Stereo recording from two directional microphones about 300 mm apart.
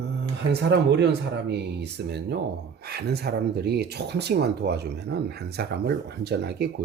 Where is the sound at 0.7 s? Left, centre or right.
Right.